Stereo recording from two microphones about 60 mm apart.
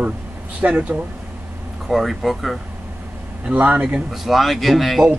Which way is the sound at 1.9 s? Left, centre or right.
Centre.